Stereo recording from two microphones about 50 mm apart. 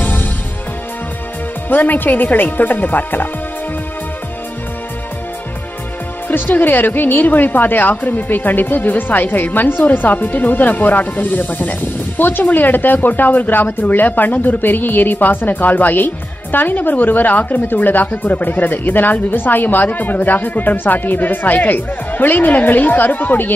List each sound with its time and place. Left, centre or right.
0.0 s music: left
1.7 s speech: left
6.2 s speech: left